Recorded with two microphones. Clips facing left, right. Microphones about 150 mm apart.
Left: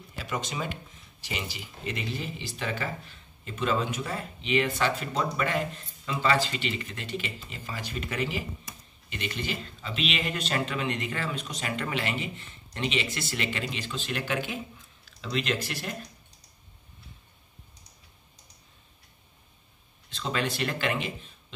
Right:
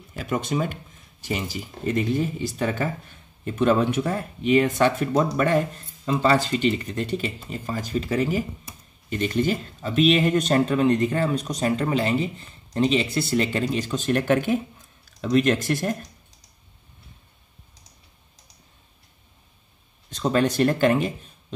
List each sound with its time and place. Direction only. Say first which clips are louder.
0.1 s speech: right 8 dB; 50° right (ahead or behind)
20.1 s speech: right 9 dB; 45° right (ahead or behind)